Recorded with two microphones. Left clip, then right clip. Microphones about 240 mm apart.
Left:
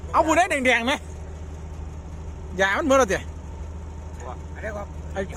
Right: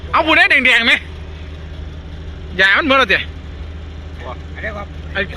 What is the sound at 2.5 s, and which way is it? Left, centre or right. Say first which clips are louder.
Speech: right 8 dB; centre.